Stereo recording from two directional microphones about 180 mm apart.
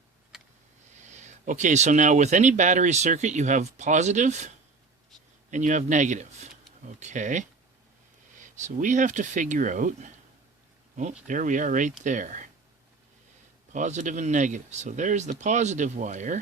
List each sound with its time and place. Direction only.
1.0 s speech: 40° right (ahead or behind)
13.7 s speech: 45° right (ahead or behind)